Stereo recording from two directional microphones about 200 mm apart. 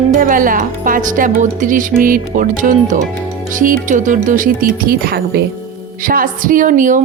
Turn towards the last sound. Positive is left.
turn(degrees=-40)  # may be behind; listen again after turning